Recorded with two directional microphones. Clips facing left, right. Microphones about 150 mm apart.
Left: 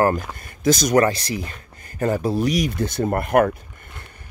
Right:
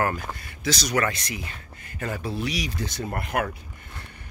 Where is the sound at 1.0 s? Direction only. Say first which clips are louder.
Left 7 dB; 35° left (ahead or behind); by 3.5 s 50° left (ahead or behind).